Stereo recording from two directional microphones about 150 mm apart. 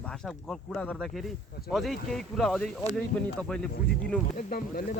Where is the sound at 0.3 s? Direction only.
5° left (ahead or behind).